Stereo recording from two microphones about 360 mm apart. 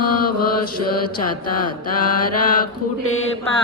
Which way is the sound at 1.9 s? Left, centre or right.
Left.